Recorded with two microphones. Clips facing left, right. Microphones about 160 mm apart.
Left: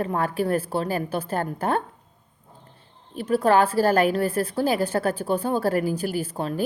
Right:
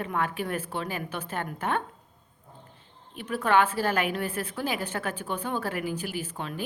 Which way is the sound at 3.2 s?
35° left (ahead or behind).